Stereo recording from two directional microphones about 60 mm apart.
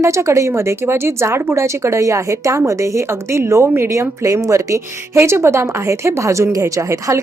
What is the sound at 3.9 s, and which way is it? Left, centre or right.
Speech, right.